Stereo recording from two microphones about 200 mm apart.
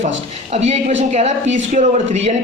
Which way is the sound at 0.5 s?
35° right (ahead or behind).